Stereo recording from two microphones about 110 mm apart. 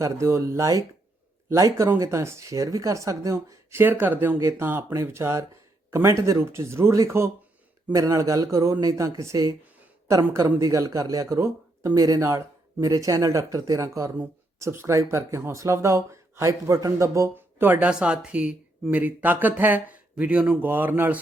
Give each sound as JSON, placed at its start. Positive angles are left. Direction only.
{"t": 0.0, "sound": "speech", "side_deg": -25}